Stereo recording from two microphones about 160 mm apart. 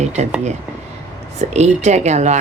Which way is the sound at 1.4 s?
45° right (ahead or behind).